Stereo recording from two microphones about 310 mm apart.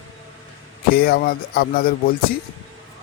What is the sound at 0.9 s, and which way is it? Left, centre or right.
Speech, left.